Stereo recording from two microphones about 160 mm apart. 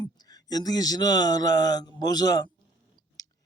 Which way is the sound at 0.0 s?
25° left (ahead or behind).